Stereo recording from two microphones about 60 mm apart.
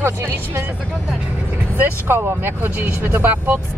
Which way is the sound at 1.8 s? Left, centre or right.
Right.